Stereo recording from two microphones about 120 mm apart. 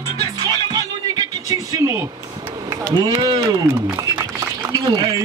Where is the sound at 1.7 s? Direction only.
25° right (ahead or behind).